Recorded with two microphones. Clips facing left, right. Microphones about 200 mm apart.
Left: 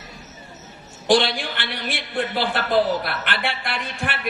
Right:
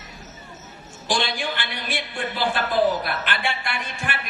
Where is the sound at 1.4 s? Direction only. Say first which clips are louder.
Even; 55° left (ahead or behind).